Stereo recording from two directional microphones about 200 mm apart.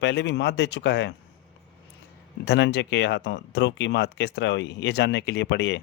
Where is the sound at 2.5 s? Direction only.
60° left (ahead or behind).